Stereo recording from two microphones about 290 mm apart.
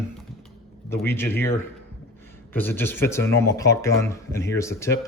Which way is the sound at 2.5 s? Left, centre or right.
Centre.